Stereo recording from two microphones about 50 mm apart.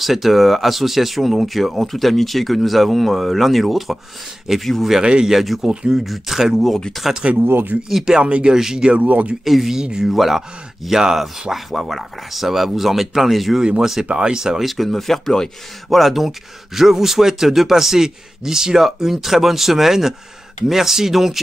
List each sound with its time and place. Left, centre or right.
0.0 s speech: centre
5.0 s speech: centre
5.3 s speech: centre
5.7 s speech: centre
5.9 s speech: centre
8.2 s speech: right
8.5 s speech: centre
8.8 s speech: right
9.4 s speech: centre